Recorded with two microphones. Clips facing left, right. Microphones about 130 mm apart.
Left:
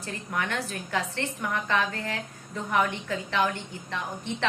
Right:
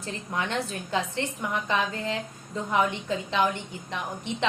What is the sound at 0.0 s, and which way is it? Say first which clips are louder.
A woman's voice: right 1 dB; 25° right (ahead or behind).